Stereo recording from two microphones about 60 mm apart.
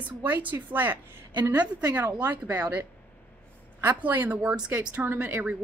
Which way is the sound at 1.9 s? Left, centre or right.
Right.